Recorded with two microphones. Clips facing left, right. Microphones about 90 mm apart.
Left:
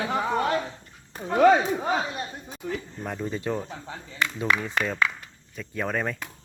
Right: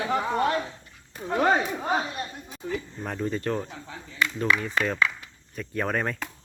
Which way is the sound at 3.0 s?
5° left (ahead or behind).